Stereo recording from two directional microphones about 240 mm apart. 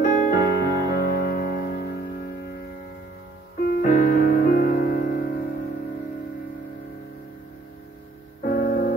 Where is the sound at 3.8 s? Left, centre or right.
Left.